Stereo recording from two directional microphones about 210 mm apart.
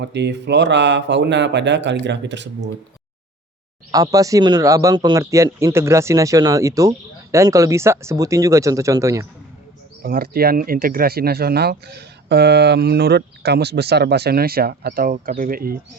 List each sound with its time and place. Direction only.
0.0 s speech: 55° right (ahead or behind)
3.9 s a man's voice: 15° right (ahead or behind)
10.0 s speech: 45° right (ahead or behind)